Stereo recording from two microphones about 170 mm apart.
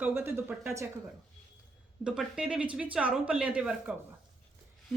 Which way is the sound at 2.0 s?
5° right (ahead or behind).